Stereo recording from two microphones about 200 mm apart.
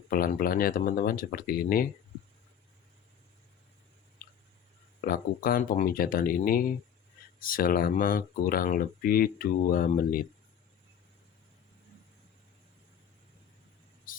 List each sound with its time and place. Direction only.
0.1 s speech: 45° left (ahead or behind)
4.9 s speech: 45° left (ahead or behind)